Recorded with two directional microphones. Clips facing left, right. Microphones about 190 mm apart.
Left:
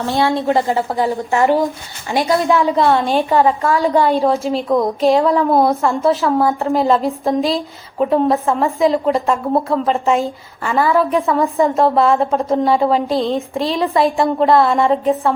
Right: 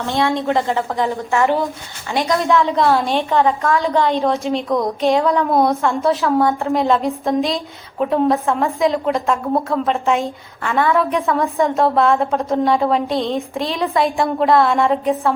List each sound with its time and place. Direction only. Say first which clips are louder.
0.2 s a woman's voice: left 2 dB; 35° left (ahead or behind)
2.0 s a woman's voice: left 2 dB; 10° left (ahead or behind)
2.7 s a woman's voice: left 2 dB; centre (ahead or behind)
4.2 s a woman's voice: left 2 dB; centre (ahead or behind)